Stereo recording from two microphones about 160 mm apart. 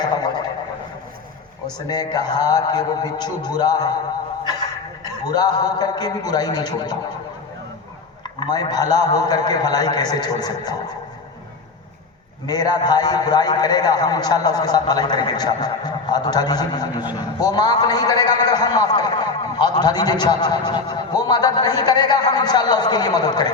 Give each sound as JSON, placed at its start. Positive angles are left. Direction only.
{"t": 0.0, "sound": "a sound", "side_deg": 25}
{"t": 1.9, "sound": "a man's voice", "side_deg": 25}
{"t": 5.2, "sound": "a man's voice", "side_deg": 25}
{"t": 8.2, "sound": "a man's voice", "side_deg": 25}
{"t": 12.5, "sound": "a man's voice", "side_deg": 25}